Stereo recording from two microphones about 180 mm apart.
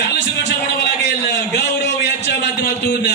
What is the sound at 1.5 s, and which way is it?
A man's voice, 70° left (ahead or behind).